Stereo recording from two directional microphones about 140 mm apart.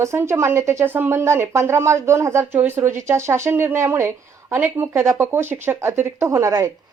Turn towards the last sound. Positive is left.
turn(degrees=-25)  # may be behind; listen again after turning